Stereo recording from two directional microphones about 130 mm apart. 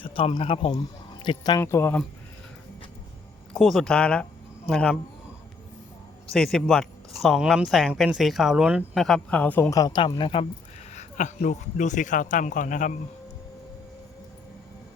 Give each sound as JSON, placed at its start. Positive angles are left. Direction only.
{"t": 0.0, "sound": "speech", "side_deg": 45}
{"t": 1.2, "sound": "speech", "side_deg": 35}
{"t": 1.6, "sound": "speech", "side_deg": 20}
{"t": 3.5, "sound": "speech", "side_deg": 0}
{"t": 6.3, "sound": "speech", "side_deg": 5}
{"t": 9.0, "sound": "speech", "side_deg": 10}
{"t": 10.9, "sound": "speech", "side_deg": 65}